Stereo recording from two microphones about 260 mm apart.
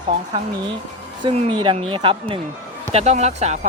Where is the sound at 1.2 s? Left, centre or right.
Centre.